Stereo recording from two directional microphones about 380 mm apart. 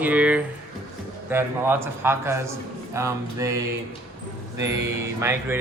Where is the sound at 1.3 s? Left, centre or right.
Centre.